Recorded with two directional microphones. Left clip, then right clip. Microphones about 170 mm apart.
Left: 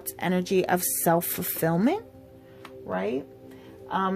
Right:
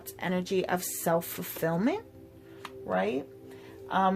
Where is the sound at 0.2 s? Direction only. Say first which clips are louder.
Left 5 dB; 50° left (ahead or behind).